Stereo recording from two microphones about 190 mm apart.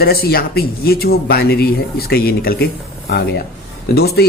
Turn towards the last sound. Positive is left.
turn(degrees=55)  # may be behind; listen again after turning